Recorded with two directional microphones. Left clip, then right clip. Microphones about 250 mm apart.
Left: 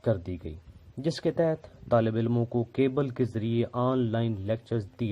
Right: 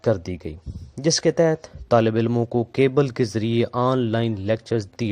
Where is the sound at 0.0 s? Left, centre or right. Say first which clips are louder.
Right 7 dB; right.